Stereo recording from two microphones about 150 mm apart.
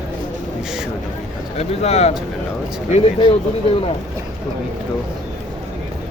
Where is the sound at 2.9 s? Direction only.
35° left (ahead or behind).